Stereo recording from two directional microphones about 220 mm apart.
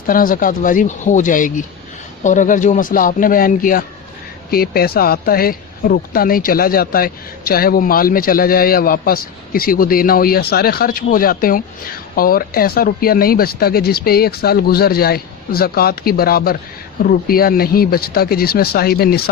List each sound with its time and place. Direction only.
0.1 s speech: 40° left (ahead or behind)